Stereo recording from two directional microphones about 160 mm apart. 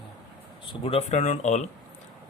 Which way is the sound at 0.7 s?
35° left (ahead or behind).